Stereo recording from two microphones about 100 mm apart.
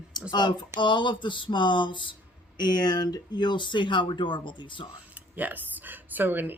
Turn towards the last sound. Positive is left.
turn(degrees=-20)  # may be behind; listen again after turning